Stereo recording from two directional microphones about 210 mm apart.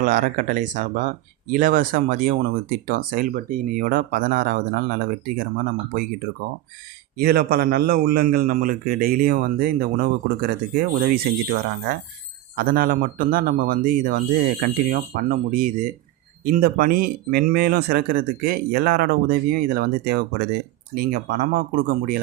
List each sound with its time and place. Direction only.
0.0 s speech: 40° right (ahead or behind)
7.2 s a man's voice: 45° right (ahead or behind)